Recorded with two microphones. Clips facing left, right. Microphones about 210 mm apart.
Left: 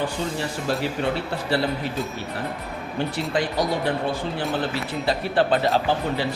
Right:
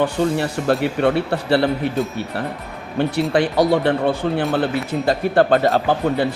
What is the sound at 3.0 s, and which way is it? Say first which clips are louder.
A man's voice: right 7 dB; 65° right (ahead or behind).